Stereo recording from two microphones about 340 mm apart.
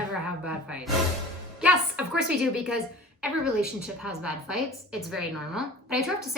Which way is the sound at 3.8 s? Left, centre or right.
Centre.